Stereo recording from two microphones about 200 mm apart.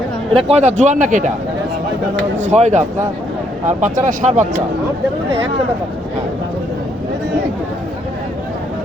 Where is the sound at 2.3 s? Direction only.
35° right (ahead or behind).